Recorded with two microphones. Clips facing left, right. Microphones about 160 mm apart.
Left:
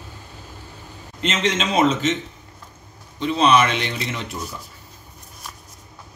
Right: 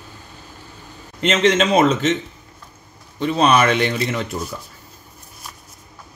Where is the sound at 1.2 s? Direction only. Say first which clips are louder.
Right 6 dB; 55° right (ahead or behind).